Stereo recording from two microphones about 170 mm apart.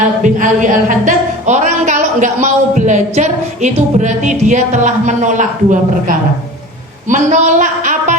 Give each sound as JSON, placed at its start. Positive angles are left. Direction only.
{"t": 0.2, "sound": "a woman's voice", "side_deg": -50}